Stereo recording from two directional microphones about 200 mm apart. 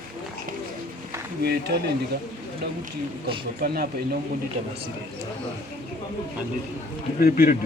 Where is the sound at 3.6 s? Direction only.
50° right (ahead or behind).